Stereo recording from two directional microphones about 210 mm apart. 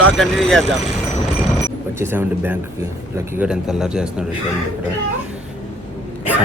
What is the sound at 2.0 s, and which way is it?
Speech, 10° right (ahead or behind).